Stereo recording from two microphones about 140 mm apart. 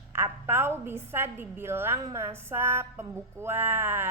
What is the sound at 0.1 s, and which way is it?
A woman's voice, 15° right (ahead or behind).